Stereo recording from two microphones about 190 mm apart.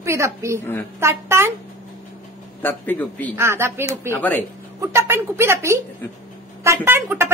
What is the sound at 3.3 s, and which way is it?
Speech, 15° right (ahead or behind).